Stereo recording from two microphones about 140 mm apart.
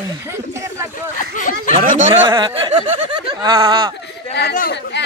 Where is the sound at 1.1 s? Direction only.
65° left (ahead or behind).